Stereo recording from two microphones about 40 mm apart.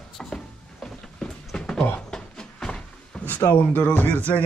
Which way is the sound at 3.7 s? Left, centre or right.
Left.